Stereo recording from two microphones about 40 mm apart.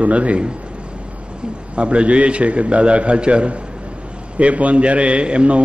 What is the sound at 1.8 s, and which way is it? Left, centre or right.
A man's voice, right.